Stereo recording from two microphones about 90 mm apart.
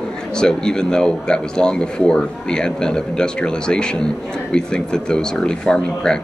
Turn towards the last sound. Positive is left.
turn(degrees=10)  # may be behind; listen again after turning